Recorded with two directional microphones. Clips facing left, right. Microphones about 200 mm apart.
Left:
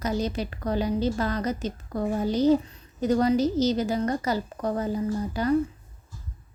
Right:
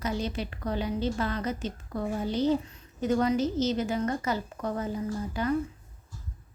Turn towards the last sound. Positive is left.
turn(degrees=35)  # may be behind; listen again after turning